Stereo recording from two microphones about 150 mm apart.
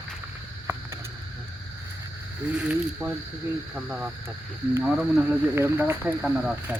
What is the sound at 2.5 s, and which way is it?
Speech, 5° right (ahead or behind).